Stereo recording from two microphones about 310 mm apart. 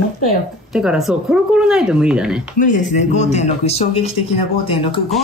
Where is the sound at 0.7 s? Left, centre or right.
Centre.